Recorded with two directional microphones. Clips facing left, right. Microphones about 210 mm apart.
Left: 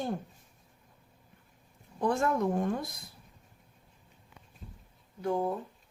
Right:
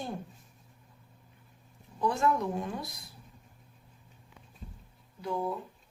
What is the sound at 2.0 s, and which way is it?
Speech, 50° left (ahead or behind).